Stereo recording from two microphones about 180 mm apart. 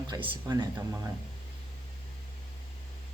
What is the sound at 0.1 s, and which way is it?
Speech, 25° right (ahead or behind).